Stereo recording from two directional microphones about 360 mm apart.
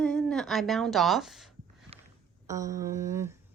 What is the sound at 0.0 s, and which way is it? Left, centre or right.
A woman's voice, centre.